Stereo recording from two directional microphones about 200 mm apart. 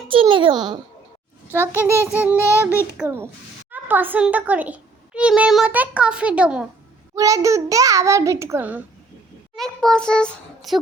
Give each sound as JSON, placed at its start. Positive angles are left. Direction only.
{"t": 0.1, "sound": "a child's voice", "side_deg": -25}
{"t": 1.6, "sound": "a child's voice", "side_deg": -5}
{"t": 7.2, "sound": "a child's voice", "side_deg": -15}
{"t": 9.6, "sound": "a child's voice", "side_deg": 5}